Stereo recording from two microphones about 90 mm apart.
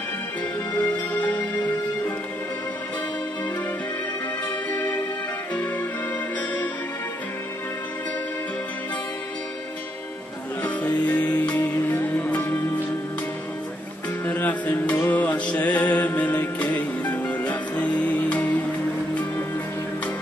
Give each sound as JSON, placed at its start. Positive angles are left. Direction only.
{"t": 0.7, "sound": "music", "side_deg": 15}
{"t": 4.7, "sound": "music", "side_deg": 15}
{"t": 10.6, "sound": "music", "side_deg": 15}
{"t": 14.2, "sound": "music", "side_deg": 20}